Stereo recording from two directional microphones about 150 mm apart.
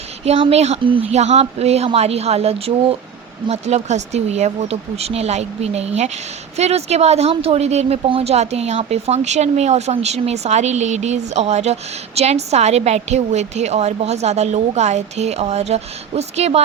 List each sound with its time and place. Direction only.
0.3 s speech: 45° right (ahead or behind)